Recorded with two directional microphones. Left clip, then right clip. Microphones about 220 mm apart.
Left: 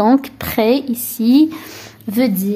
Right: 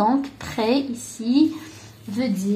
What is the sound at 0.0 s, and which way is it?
A woman's voice, 45° left (ahead or behind).